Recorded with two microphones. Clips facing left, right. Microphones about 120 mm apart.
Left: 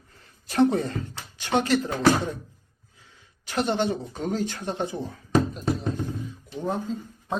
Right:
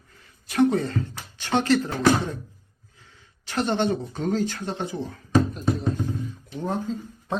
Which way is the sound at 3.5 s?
10° left (ahead or behind).